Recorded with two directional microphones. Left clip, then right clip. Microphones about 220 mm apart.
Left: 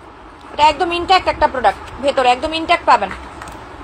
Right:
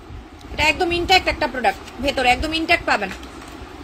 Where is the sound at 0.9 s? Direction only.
25° right (ahead or behind).